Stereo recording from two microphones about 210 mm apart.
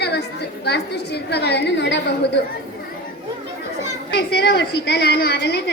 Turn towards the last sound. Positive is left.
turn(degrees=50)  # may be behind; listen again after turning